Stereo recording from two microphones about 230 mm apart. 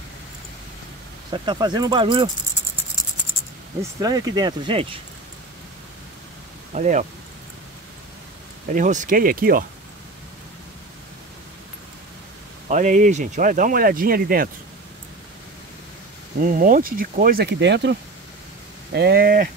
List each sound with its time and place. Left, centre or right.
1.3 s speech: centre
4.0 s speech: centre
6.7 s speech: right
8.7 s speech: right
12.6 s speech: right
16.4 s speech: right